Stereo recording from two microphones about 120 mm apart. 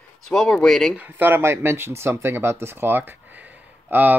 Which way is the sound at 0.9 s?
15° right (ahead or behind).